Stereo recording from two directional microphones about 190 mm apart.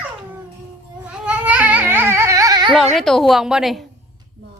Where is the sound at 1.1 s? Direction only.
5° right (ahead or behind); by 2.8 s 20° right (ahead or behind).